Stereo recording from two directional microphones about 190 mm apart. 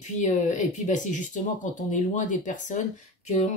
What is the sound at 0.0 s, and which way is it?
Speech, 40° left (ahead or behind).